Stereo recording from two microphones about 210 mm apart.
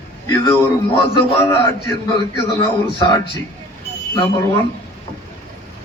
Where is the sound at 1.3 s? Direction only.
10° left (ahead or behind).